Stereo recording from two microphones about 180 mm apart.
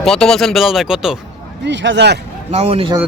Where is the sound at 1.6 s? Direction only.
85° right.